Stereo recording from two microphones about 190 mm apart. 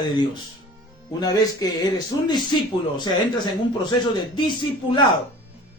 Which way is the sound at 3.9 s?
25° left (ahead or behind).